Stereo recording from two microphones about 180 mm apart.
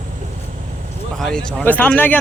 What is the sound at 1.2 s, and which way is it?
Speech, 5° left (ahead or behind).